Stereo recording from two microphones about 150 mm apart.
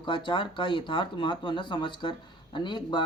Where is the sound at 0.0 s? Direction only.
35° left (ahead or behind).